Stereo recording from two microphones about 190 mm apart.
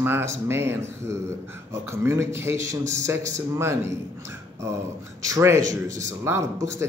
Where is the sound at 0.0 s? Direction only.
10° right (ahead or behind).